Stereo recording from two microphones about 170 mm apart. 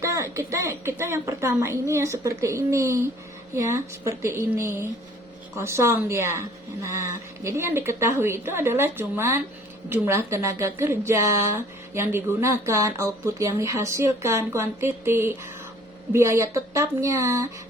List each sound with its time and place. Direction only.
0.0 s a woman's voice: 15° right (ahead or behind)
7.4 s a woman's voice: 15° right (ahead or behind)